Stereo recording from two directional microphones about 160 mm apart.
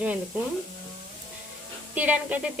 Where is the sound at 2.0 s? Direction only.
10° right (ahead or behind).